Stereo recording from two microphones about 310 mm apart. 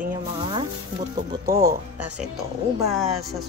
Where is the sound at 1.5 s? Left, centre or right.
Right.